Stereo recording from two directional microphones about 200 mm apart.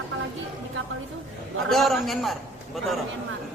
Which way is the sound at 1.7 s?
Centre (ahead or behind).